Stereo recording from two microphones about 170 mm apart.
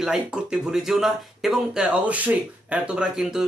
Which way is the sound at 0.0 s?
5° right (ahead or behind).